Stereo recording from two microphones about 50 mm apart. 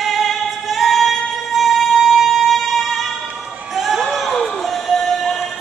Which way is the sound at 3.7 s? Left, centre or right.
Centre.